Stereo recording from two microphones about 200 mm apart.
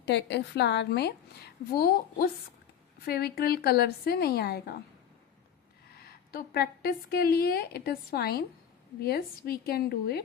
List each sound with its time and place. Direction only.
0.0 s a woman's voice: 60° left (ahead or behind)
5.9 s a woman's voice: 50° left (ahead or behind)